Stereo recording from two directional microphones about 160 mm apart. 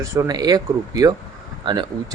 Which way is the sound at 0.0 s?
20° right (ahead or behind).